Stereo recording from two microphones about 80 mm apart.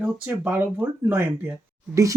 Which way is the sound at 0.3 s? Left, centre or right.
Right.